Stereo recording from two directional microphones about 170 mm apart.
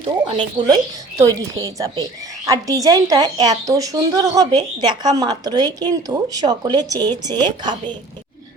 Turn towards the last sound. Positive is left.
turn(degrees=-25)  # may be behind; listen again after turning